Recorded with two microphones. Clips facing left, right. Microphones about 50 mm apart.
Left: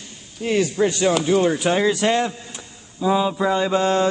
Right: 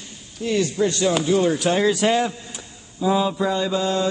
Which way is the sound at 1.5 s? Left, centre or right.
Centre.